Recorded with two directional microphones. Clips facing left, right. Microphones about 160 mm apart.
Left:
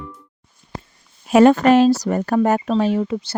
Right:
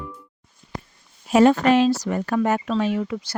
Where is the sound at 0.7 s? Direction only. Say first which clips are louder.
Left 1 dB; 25° left (ahead or behind).